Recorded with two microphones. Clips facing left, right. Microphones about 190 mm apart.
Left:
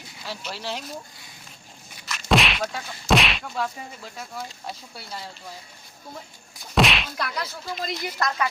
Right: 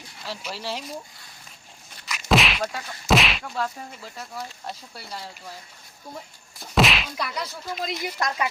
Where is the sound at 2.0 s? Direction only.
Centre (ahead or behind).